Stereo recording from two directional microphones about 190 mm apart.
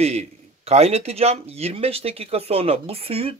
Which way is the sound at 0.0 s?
35° right (ahead or behind).